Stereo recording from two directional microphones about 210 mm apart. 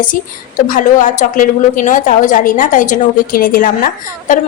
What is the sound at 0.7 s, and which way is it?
A woman's voice, 40° left (ahead or behind).